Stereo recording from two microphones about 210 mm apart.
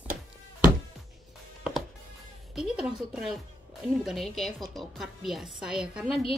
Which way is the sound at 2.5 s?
5° right (ahead or behind).